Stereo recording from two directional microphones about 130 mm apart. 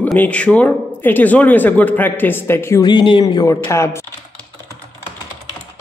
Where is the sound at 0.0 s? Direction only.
10° left (ahead or behind).